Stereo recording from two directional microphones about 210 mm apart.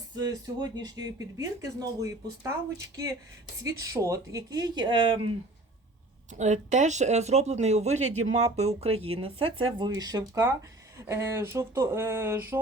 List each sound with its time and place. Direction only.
0.2 s speech: 20° right (ahead or behind)
6.3 s speech: 35° right (ahead or behind); by 12.5 s 10° right (ahead or behind)